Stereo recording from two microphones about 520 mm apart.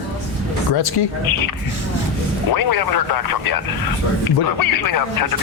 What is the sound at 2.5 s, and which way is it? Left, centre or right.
Speech, left.